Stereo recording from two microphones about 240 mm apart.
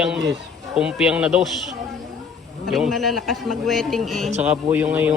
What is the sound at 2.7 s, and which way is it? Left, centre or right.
A man's voice, centre.